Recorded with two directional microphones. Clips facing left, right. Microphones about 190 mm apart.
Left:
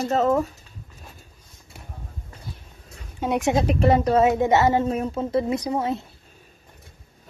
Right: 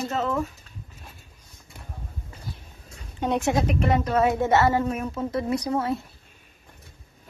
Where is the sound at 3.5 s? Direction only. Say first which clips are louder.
Left 6 dB; 30° left (ahead or behind).